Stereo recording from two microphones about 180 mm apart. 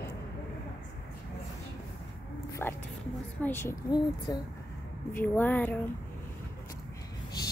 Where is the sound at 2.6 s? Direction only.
10° left (ahead or behind).